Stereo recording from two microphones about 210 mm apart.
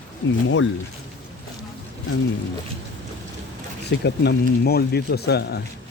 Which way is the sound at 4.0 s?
55° left (ahead or behind).